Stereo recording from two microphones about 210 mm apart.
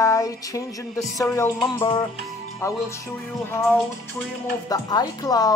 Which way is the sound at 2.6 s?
15° left (ahead or behind).